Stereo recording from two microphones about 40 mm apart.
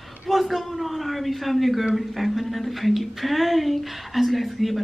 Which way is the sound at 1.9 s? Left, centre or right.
Centre.